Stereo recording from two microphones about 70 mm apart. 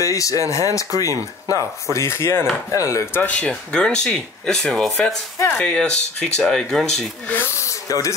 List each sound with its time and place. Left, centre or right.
0.0 s speech: left
1.9 s speech: left
2.7 s speech: left
3.1 s speech: left
3.3 s speech: centre
7.3 s speech: left